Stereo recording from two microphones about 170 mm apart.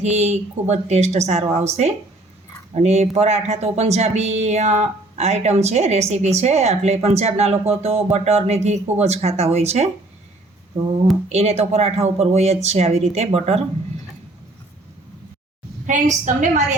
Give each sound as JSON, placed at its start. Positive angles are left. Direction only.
{"t": 0.0, "sound": "speech", "side_deg": -40}
{"t": 11.3, "sound": "speech", "side_deg": -40}
{"t": 15.9, "sound": "a woman's voice", "side_deg": -45}